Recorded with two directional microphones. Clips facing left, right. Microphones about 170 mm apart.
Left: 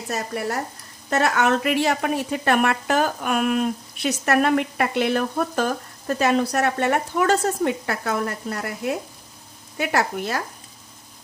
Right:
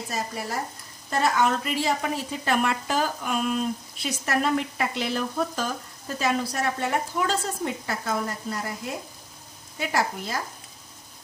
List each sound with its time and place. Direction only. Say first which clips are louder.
0.1 s speech: left 6 dB; 65° left (ahead or behind)